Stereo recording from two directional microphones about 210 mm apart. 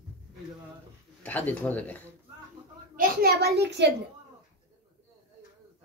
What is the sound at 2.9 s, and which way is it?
A woman's voice, 45° right (ahead or behind).